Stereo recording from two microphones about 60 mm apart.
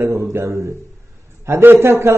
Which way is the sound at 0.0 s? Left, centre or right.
Right.